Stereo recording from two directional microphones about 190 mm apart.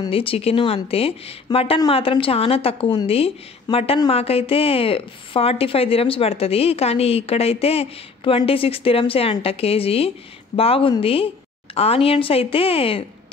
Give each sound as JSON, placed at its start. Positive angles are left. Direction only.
{"t": 0.0, "sound": "speech", "side_deg": 30}